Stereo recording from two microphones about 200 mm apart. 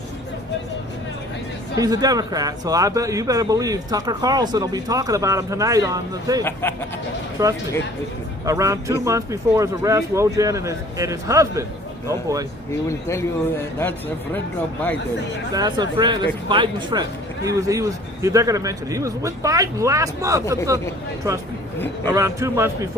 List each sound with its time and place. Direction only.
1.7 s speech: 20° right (ahead or behind)
6.4 s speech: 10° left (ahead or behind)
7.4 s speech: 15° right (ahead or behind)
15.5 s speech: 20° right (ahead or behind)
22.0 s speech: 15° right (ahead or behind)